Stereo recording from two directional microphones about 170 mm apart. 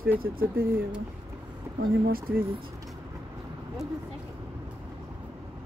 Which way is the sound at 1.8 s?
60° right (ahead or behind).